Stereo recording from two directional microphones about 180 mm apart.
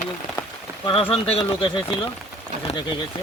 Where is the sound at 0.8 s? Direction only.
30° left (ahead or behind).